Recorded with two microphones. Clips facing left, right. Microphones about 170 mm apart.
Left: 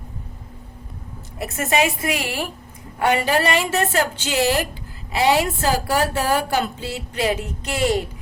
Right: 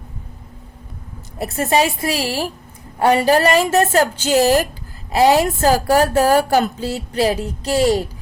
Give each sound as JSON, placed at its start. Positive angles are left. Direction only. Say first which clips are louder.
{"t": 1.4, "sound": "a woman's voice", "louder": "right 3 dB", "side_deg": -35}